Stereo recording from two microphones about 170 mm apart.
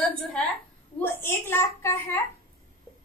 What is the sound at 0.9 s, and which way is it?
A child's voice, 10° left (ahead or behind).